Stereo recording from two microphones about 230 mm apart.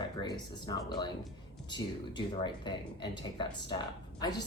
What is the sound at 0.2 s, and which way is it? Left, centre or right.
A man's voice, centre.